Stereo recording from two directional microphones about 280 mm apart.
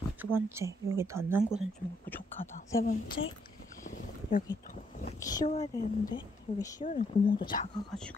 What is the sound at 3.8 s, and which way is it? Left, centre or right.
Boat, left.